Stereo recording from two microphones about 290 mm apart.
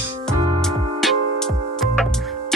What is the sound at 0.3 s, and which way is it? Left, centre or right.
Music, centre.